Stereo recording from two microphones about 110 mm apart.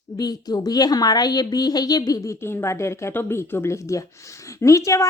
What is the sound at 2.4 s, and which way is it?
Speech, 25° left (ahead or behind).